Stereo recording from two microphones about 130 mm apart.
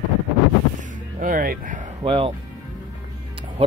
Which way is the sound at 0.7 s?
90° right.